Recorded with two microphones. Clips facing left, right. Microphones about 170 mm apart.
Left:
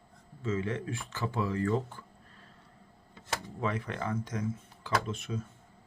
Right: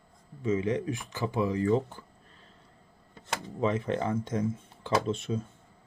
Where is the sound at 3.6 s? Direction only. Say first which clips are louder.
Right 7 dB; 20° right (ahead or behind).